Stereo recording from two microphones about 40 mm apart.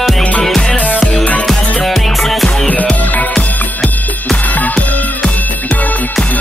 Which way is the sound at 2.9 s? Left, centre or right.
Left.